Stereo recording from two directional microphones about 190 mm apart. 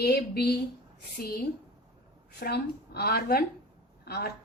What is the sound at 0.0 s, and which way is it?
Speech, 55° left (ahead or behind).